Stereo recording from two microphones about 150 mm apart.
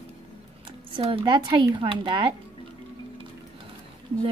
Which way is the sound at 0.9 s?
30° right (ahead or behind).